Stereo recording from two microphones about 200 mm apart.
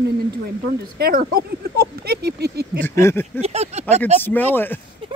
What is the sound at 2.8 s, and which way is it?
Speech, 10° left (ahead or behind).